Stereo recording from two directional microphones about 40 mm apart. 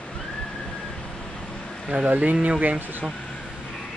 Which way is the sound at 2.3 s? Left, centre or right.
Right.